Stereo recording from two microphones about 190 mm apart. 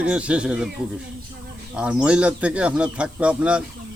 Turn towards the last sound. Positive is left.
turn(degrees=-5)  # may be behind; listen again after turning